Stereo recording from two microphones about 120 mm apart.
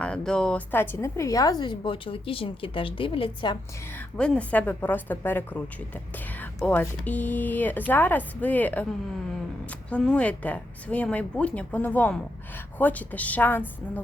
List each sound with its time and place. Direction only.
0.0 s a woman's voice: 5° left (ahead or behind); by 3.6 s 40° left (ahead or behind)
3.9 s speech: 10° left (ahead or behind)
6.7 s speech: 15° left (ahead or behind)